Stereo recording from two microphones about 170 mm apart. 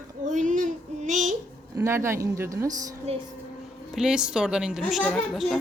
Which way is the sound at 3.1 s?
40° right (ahead or behind).